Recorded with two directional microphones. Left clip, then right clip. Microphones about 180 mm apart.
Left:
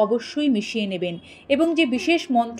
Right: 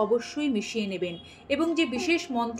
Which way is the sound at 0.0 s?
30° left (ahead or behind).